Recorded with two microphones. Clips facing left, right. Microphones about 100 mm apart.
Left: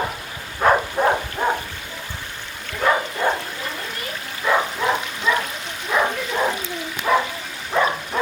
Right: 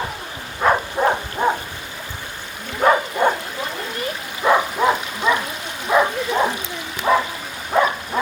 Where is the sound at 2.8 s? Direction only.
30° right (ahead or behind).